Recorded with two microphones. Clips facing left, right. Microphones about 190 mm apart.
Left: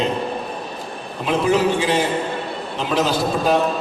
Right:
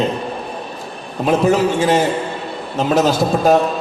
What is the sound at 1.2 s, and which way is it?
A man's voice, 45° right (ahead or behind).